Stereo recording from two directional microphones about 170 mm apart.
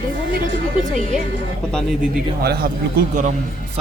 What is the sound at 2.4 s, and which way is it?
Speech, 65° right (ahead or behind).